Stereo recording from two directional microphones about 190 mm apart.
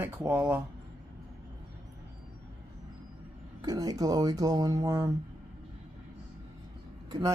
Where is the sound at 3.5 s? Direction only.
20° right (ahead or behind).